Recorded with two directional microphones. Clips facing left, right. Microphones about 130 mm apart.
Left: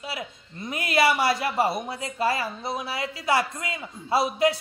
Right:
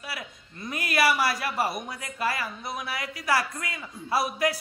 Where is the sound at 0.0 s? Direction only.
25° left (ahead or behind).